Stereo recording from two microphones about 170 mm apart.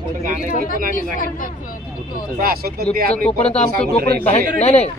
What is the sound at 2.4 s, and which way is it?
Speech, 65° right (ahead or behind).